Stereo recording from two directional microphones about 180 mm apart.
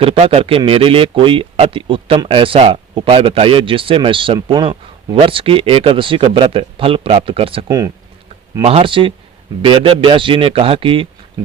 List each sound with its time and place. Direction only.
0.0 s speech: 30° right (ahead or behind)